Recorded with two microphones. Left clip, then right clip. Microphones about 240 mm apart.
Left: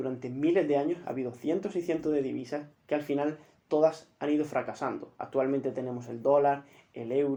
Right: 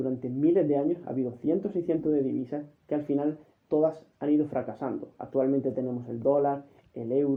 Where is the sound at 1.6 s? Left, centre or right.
Centre.